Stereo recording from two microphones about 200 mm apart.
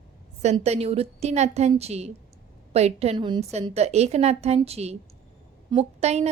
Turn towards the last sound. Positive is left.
turn(degrees=-30)  # may be behind; listen again after turning